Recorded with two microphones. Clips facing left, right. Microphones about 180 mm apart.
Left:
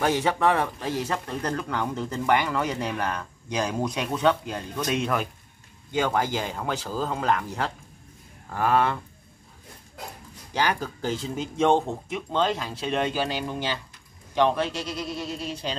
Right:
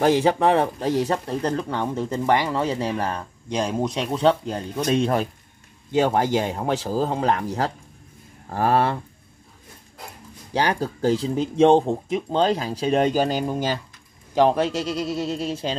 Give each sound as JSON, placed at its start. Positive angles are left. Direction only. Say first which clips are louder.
{"t": 0.0, "sound": "speech", "louder": "right 5 dB", "side_deg": -35}
{"t": 10.5, "sound": "speech", "louder": "right 4 dB", "side_deg": -35}